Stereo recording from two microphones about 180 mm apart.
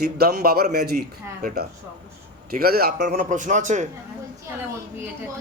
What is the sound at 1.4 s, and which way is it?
A man's voice, 50° right (ahead or behind).